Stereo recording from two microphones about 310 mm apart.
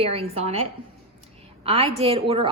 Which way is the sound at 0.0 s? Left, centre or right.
Centre.